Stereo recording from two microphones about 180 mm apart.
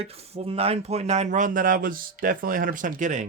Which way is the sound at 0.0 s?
35° right (ahead or behind).